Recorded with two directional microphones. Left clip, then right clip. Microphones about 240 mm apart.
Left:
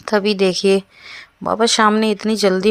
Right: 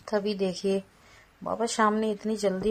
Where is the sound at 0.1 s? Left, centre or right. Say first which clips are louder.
Left 12 dB; left.